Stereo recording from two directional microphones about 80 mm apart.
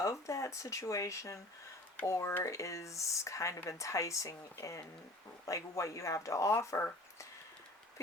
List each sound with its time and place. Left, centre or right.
0.0 s speech: left